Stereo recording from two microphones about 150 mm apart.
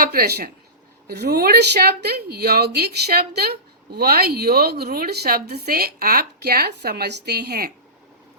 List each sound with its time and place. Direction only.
0.0 s a woman's voice: 90° right